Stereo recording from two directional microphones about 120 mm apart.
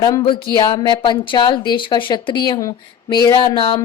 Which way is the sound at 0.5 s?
30° left (ahead or behind).